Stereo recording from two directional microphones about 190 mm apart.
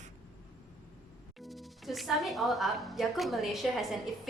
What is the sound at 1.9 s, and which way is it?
Speech, centre (ahead or behind).